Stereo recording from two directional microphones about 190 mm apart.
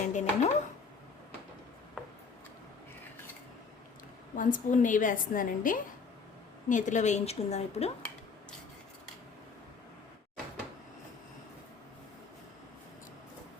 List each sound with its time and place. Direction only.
0.0 s a woman's voice: 40° left (ahead or behind)
4.4 s a woman's voice: 45° left (ahead or behind)